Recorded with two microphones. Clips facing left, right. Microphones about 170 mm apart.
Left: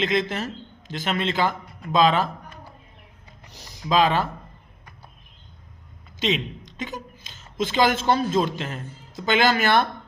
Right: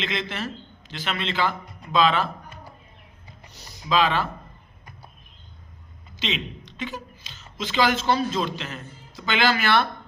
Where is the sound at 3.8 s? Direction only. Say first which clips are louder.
Left 2 dB; 45° left (ahead or behind).